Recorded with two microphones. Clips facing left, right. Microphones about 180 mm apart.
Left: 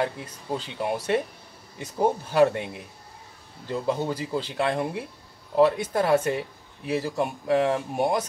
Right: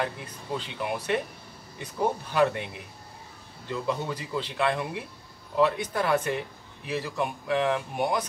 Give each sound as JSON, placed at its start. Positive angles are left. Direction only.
{"t": 0.0, "sound": "speech", "side_deg": 40}
{"t": 3.6, "sound": "speech", "side_deg": 35}
{"t": 5.9, "sound": "speech", "side_deg": 30}